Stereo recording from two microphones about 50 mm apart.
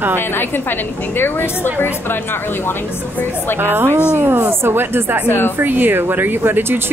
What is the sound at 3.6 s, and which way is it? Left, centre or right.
Speech, right.